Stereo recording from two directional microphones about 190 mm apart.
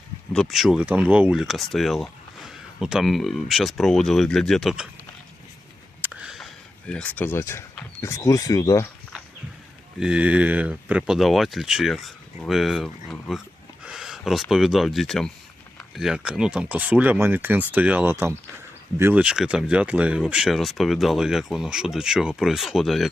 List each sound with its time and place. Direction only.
0.3 s speech: centre (ahead or behind)
6.0 s speech: 5° right (ahead or behind); by 8.9 s 15° left (ahead or behind)
10.0 s speech: 5° right (ahead or behind)